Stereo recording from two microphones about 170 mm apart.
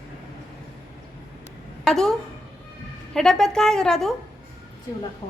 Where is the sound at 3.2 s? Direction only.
5° left (ahead or behind).